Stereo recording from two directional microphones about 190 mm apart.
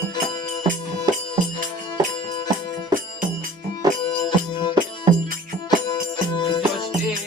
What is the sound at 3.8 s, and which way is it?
Music, 20° right (ahead or behind).